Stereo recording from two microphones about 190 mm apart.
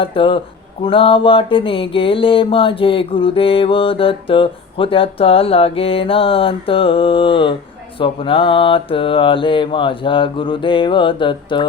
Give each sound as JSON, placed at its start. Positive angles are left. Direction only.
{"t": 0.0, "sound": "mantra", "side_deg": 25}